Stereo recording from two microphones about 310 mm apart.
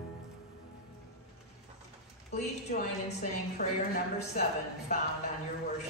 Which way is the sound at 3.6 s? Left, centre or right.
Left.